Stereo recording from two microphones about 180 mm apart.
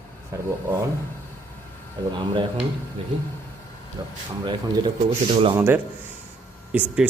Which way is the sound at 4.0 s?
25° right (ahead or behind).